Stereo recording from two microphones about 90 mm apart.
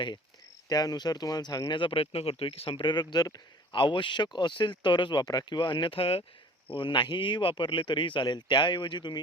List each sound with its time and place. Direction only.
0.7 s speech: 45° left (ahead or behind)
1.8 s speech: 90° left; by 3.4 s 50° left (ahead or behind)
3.7 s speech: 65° left (ahead or behind); by 6.2 s 90° left
6.7 s speech: 65° left (ahead or behind)